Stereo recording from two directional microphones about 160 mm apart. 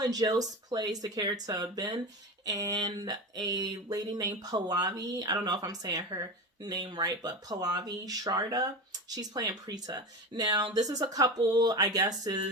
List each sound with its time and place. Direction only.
0.0 s speech: 25° right (ahead or behind)